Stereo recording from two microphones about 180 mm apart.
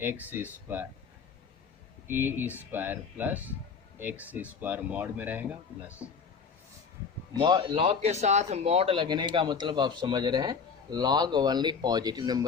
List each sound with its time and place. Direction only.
0.0 s speech: 10° right (ahead or behind)
2.0 s speech: 10° right (ahead or behind)
7.3 s speech: 25° right (ahead or behind)
7.9 s speech: 35° right (ahead or behind); by 12.5 s 20° right (ahead or behind)